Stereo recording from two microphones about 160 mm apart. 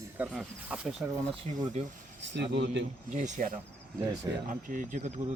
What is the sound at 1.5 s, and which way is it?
Speech, 50° right (ahead or behind).